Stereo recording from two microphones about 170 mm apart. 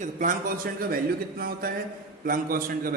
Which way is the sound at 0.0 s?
50° right (ahead or behind).